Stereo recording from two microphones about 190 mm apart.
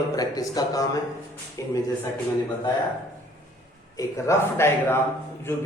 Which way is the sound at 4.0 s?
15° left (ahead or behind).